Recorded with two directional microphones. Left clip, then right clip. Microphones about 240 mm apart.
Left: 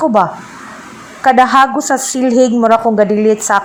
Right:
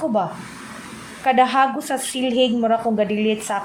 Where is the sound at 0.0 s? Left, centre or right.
Left.